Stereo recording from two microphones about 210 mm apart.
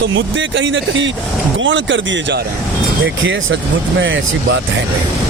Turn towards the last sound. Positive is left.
turn(degrees=-60)  # may be behind; listen again after turning